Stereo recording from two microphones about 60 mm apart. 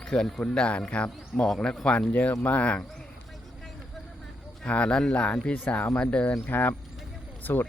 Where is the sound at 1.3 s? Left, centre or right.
Centre.